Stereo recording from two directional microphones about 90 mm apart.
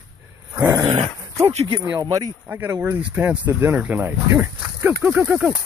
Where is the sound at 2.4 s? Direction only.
20° right (ahead or behind).